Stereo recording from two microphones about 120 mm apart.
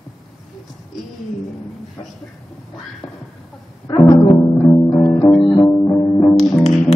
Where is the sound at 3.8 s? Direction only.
30° left (ahead or behind).